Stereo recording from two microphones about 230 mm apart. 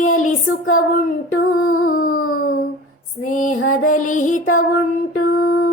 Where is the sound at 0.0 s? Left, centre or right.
Left.